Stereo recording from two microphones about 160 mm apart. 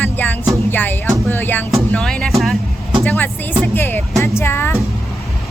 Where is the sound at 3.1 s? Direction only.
10° left (ahead or behind).